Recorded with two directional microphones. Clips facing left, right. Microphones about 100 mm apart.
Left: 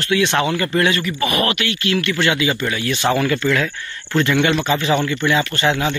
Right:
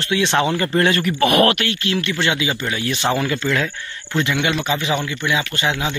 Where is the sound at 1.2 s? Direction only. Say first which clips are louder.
Right 6 dB; 60° right (ahead or behind).